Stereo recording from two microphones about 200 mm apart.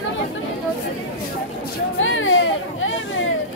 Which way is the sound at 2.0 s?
80° left.